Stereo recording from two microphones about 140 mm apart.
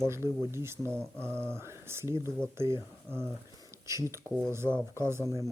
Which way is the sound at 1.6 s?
20° right (ahead or behind).